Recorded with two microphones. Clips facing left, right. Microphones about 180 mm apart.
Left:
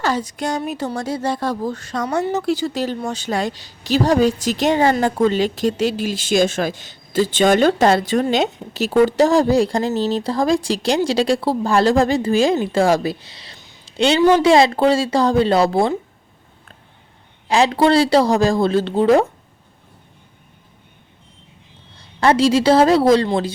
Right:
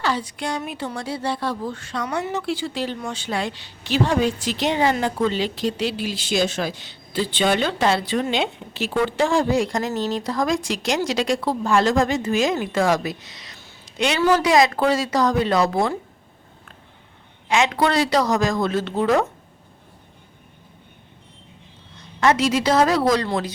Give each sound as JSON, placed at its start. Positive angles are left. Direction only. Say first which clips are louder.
{"t": 0.0, "sound": "a woman's voice", "louder": "left 4 dB", "side_deg": 45}
{"t": 13.8, "sound": "a sound", "louder": "left 6 dB", "side_deg": 30}
{"t": 14.4, "sound": "speech", "louder": "left 4 dB", "side_deg": 30}
{"t": 17.5, "sound": "a woman's voice", "louder": "left 5 dB", "side_deg": 30}
{"t": 21.9, "sound": "a woman's voice", "louder": "left 3 dB", "side_deg": 30}